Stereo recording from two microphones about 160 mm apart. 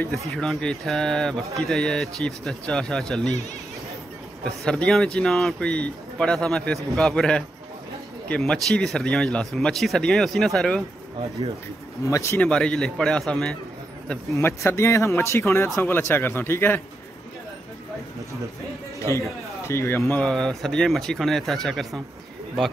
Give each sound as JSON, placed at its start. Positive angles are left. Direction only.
{"t": 0.3, "sound": "speech", "side_deg": 5}
{"t": 4.6, "sound": "speech", "side_deg": 5}
{"t": 12.0, "sound": "speech", "side_deg": 20}
{"t": 12.4, "sound": "speech", "side_deg": 5}
{"t": 14.3, "sound": "speech", "side_deg": 15}
{"t": 18.9, "sound": "speech", "side_deg": 20}